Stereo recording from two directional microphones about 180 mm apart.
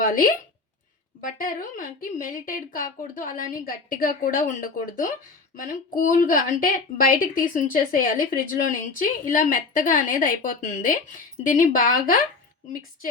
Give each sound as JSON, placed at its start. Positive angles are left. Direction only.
{"t": 0.0, "sound": "a woman's voice", "side_deg": 50}